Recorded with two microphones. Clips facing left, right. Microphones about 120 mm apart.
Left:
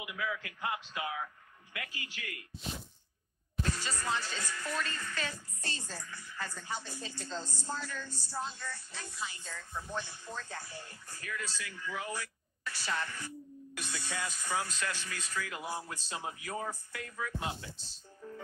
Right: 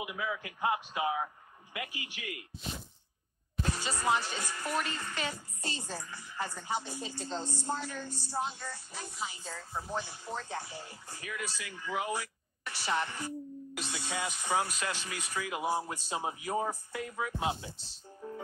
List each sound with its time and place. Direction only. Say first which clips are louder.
0.0 s a man's voice: right 2 dB; 25° right (ahead or behind)
3.7 s a man's voice: right 5 dB; 20° right (ahead or behind)
5.9 s a woman's voice: right 4 dB; 30° right (ahead or behind)
9.8 s a woman's voice: right 4 dB; 15° right (ahead or behind)
18.2 s music: right 4 dB; 20° right (ahead or behind)